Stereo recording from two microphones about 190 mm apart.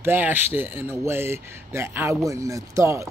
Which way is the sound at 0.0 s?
10° right (ahead or behind).